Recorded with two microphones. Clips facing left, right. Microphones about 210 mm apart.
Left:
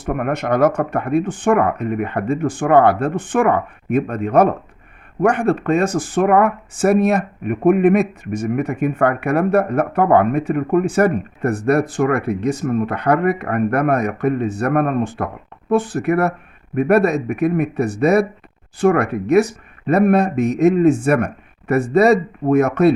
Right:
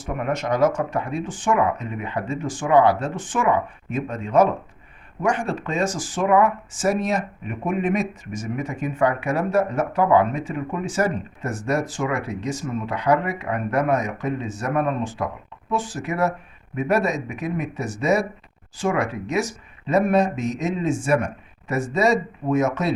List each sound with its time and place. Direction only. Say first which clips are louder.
0.0 s speech: left 5 dB; 60° left (ahead or behind)